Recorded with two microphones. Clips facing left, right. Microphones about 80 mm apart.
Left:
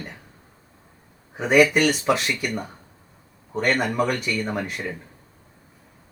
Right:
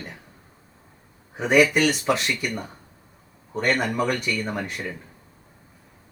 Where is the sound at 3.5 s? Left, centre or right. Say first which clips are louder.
Left 1 dB; centre.